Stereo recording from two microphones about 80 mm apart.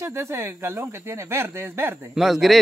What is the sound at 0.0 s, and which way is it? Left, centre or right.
Speech, right.